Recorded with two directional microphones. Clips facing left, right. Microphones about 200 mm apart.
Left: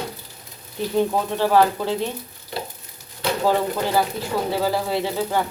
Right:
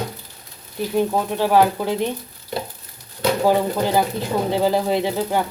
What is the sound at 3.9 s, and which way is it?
Speech, 20° right (ahead or behind).